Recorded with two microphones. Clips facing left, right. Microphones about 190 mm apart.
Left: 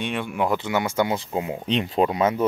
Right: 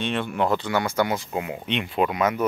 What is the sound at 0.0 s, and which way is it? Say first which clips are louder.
Speech: right 1 dB; 10° left (ahead or behind).